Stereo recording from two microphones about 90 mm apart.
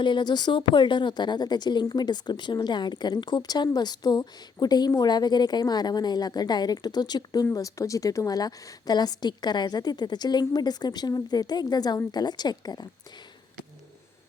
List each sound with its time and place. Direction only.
0.0 s a woman's voice: 60° left (ahead or behind)
7.5 s a woman's voice: 35° left (ahead or behind)